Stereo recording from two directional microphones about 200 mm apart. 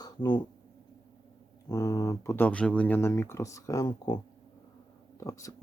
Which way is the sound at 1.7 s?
15° left (ahead or behind).